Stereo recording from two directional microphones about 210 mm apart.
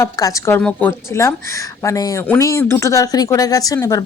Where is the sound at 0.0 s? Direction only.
15° left (ahead or behind).